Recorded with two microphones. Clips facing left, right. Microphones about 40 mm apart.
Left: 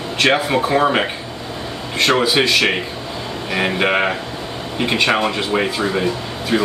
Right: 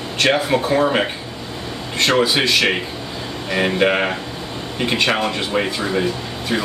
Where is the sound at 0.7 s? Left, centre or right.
Centre.